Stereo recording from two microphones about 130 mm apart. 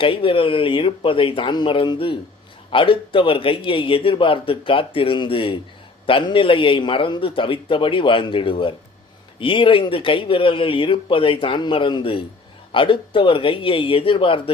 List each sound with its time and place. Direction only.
0.0 s a man's voice: 40° left (ahead or behind)